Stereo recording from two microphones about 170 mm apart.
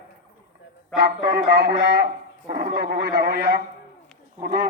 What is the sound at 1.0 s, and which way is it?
Speech, 70° right (ahead or behind).